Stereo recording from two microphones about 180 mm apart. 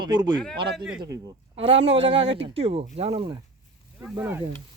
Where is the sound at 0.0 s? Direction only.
25° right (ahead or behind).